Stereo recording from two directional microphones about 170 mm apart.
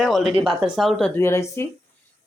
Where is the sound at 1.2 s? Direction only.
15° left (ahead or behind).